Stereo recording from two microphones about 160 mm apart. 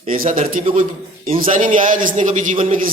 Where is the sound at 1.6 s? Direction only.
55° right (ahead or behind).